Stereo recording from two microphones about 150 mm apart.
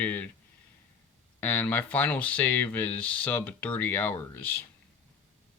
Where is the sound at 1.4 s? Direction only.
10° left (ahead or behind).